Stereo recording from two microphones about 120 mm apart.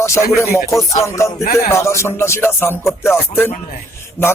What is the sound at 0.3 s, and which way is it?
Speech, 20° left (ahead or behind).